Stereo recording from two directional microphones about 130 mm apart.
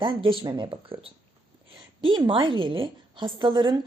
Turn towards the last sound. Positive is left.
turn(degrees=-35)  # may be behind; listen again after turning